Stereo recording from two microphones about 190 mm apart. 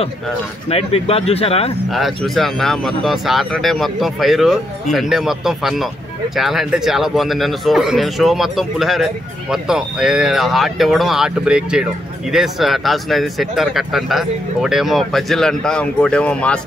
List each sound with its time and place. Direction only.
0.7 s speech: 30° left (ahead or behind)
1.9 s speech: centre (ahead or behind)